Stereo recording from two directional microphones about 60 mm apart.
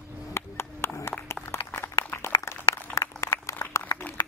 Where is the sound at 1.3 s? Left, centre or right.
Left.